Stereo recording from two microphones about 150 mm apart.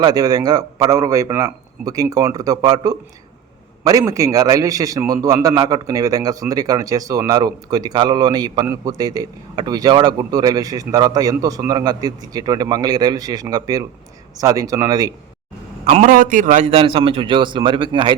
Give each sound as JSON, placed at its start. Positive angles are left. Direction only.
{"t": 0.0, "sound": "a man's voice", "side_deg": -25}
{"t": 15.8, "sound": "a man's voice", "side_deg": -45}
{"t": 16.0, "sound": "a man's voice", "side_deg": -65}
{"t": 16.6, "sound": "a man's voice", "side_deg": -40}